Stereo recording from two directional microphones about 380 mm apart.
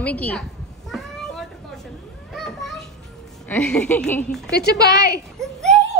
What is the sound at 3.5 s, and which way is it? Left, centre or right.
Speech, centre.